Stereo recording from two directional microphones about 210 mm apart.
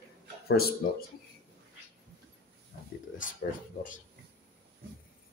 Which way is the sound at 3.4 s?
40° left (ahead or behind).